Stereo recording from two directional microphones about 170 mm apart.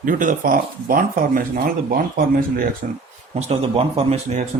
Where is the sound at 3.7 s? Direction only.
35° right (ahead or behind).